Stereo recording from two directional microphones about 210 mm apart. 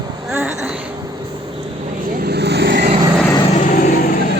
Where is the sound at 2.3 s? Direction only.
50° right (ahead or behind).